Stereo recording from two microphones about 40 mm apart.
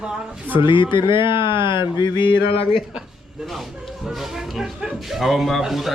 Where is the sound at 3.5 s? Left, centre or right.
Centre.